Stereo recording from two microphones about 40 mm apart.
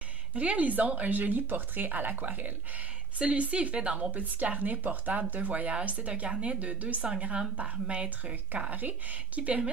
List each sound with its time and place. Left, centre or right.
0.3 s speech: right
3.2 s a woman's voice: right
4.1 s speech: right
6.6 s a woman's voice: right
8.5 s speech: right